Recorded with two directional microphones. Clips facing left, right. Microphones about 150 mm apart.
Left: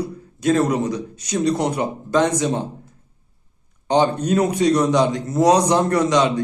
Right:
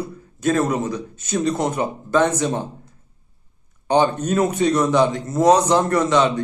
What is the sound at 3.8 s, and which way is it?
A man's voice, 15° left (ahead or behind).